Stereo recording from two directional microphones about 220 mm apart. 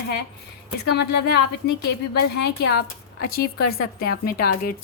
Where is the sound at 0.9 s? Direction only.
50° left (ahead or behind).